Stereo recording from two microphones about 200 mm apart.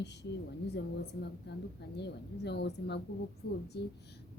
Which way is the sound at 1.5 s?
55° left (ahead or behind).